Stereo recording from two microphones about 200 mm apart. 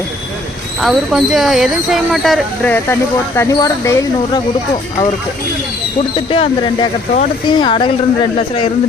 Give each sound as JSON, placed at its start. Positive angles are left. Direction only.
{"t": 0.8, "sound": "speech", "side_deg": 0}
{"t": 2.7, "sound": "speech", "side_deg": 10}
{"t": 6.1, "sound": "a woman's voice", "side_deg": 25}